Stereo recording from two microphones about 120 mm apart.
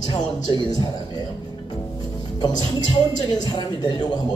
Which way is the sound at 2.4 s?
35° left (ahead or behind).